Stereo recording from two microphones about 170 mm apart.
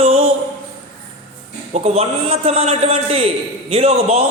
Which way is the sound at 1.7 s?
35° right (ahead or behind).